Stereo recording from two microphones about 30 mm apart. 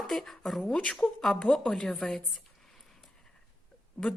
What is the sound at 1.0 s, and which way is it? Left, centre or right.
A woman's voice, left.